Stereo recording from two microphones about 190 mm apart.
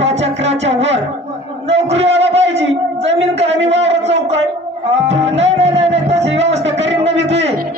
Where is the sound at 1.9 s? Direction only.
70° right (ahead or behind).